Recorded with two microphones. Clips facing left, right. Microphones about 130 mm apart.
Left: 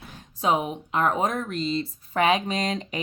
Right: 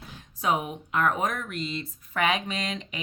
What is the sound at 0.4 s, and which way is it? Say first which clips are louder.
Speech: left 3 dB; 25° left (ahead or behind).